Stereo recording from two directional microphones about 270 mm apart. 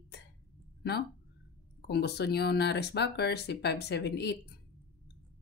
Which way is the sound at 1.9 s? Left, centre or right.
Left.